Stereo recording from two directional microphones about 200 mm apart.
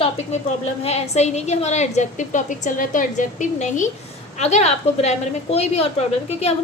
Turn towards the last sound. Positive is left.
turn(degrees=30)  # may be behind; listen again after turning